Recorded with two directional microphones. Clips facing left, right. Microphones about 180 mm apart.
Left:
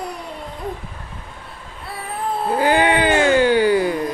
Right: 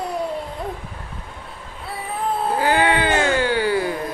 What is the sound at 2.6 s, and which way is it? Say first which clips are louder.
Music: left 3 dB; 15° left (ahead or behind).